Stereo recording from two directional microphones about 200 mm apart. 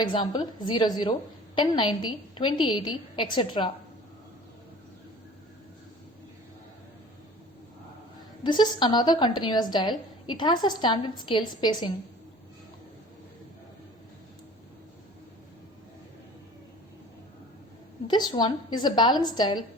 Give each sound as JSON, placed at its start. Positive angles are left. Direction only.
{"t": 0.0, "sound": "a woman's voice", "side_deg": 25}
{"t": 8.4, "sound": "a woman's voice", "side_deg": 20}
{"t": 18.1, "sound": "a woman's voice", "side_deg": 20}